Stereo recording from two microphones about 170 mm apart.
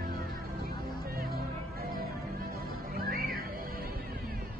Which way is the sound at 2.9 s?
60° right (ahead or behind).